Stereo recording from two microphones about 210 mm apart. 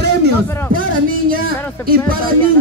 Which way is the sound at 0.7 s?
40° right (ahead or behind).